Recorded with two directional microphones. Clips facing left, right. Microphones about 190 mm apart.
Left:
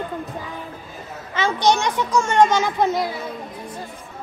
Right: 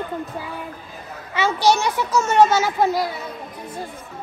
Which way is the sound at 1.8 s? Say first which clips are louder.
Even; 5° right (ahead or behind).